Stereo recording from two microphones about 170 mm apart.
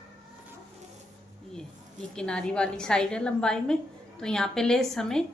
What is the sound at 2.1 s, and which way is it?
A woman's voice, 5° left (ahead or behind).